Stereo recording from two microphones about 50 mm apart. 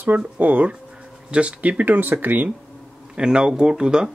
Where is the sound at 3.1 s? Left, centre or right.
Centre.